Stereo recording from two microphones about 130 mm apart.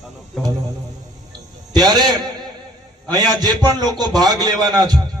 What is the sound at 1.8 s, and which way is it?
A man's voice, 30° right (ahead or behind).